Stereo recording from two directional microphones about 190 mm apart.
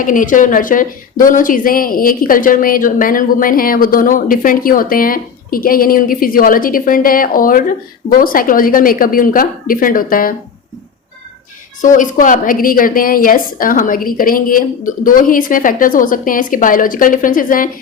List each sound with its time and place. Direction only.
0.0 s speech: 45° left (ahead or behind)
11.8 s speech: 45° left (ahead or behind)